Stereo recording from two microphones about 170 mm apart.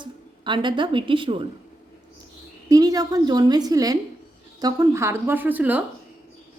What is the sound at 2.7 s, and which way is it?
A woman's voice, 20° right (ahead or behind).